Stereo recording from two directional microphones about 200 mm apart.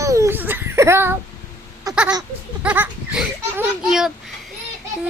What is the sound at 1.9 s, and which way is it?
Baby cry, 20° right (ahead or behind).